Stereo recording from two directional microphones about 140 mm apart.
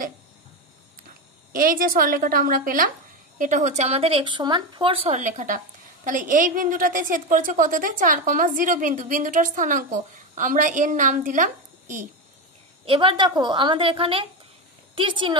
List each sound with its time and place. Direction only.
1.5 s a woman's voice: 90° right
3.3 s speech: 60° right (ahead or behind); by 5.1 s 40° right (ahead or behind)
5.1 s a woman's voice: 60° right (ahead or behind)
12.8 s a woman's voice: 40° right (ahead or behind)